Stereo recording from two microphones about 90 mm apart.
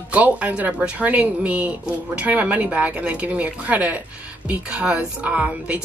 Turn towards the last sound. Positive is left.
turn(degrees=-15)  # may be behind; listen again after turning